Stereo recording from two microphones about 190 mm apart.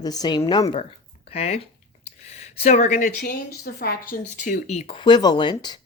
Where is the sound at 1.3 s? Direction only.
30° left (ahead or behind).